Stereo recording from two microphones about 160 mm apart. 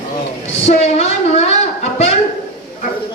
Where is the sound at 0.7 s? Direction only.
45° left (ahead or behind).